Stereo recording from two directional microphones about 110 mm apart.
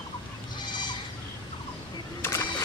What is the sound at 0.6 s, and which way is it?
Goat, 40° left (ahead or behind).